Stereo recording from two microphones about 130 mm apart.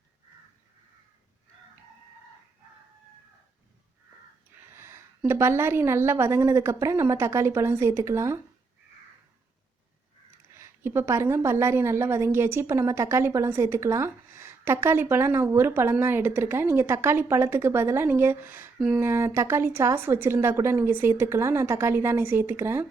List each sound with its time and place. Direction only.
4.8 s a woman's voice: 20° right (ahead or behind)
10.6 s a woman's voice: 20° right (ahead or behind)